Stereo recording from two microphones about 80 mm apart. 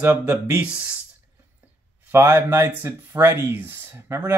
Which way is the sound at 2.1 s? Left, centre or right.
Right.